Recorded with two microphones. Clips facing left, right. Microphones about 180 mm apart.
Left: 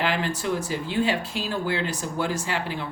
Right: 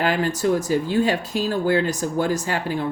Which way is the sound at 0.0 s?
45° right (ahead or behind).